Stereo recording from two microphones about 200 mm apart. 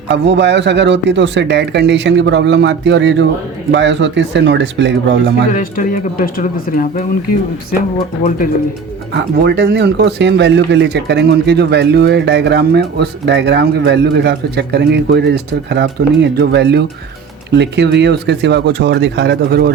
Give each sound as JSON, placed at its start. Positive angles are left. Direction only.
{"t": 0.1, "sound": "speech", "side_deg": -60}
{"t": 5.5, "sound": "speech", "side_deg": 40}
{"t": 9.1, "sound": "speech", "side_deg": -55}